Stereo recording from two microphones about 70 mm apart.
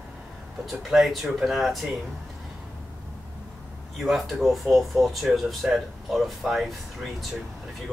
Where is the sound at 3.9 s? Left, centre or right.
Centre.